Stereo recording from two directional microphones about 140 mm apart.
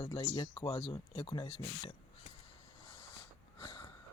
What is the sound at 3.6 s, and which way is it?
Sniff, 35° left (ahead or behind).